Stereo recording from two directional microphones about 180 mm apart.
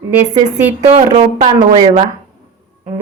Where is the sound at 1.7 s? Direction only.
30° right (ahead or behind).